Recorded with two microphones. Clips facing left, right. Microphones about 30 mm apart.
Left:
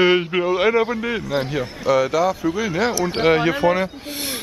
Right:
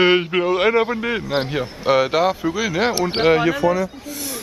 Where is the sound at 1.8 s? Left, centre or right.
Right.